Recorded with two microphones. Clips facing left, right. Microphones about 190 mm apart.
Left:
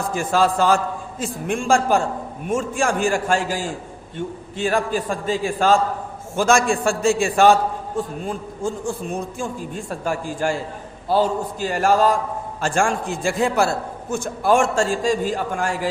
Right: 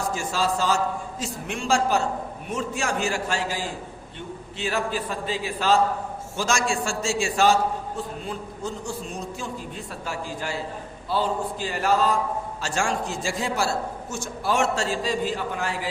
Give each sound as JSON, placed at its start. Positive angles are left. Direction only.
{"t": 0.1, "sound": "a man's voice", "side_deg": 55}